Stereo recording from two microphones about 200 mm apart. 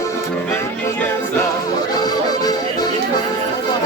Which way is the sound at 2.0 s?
20° left (ahead or behind).